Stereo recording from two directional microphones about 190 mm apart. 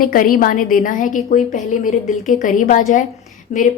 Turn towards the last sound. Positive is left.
turn(degrees=40)  # may be behind; listen again after turning